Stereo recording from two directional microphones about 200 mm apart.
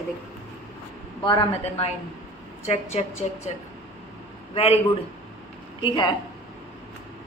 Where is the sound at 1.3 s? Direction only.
25° left (ahead or behind).